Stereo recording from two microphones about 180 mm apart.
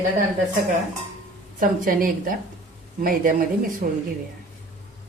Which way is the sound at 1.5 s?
50° right (ahead or behind).